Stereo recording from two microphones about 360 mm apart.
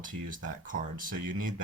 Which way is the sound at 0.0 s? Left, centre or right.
Right.